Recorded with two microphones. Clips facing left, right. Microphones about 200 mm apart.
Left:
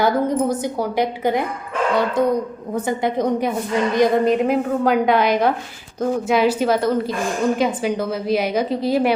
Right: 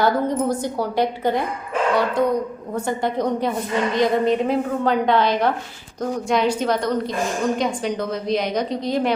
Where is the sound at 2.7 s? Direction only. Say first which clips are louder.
Left 2 dB; 20° left (ahead or behind).